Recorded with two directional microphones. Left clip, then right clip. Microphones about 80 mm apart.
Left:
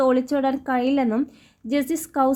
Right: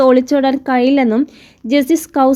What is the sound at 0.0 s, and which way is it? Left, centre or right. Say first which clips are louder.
A woman's voice: right 9 dB; right.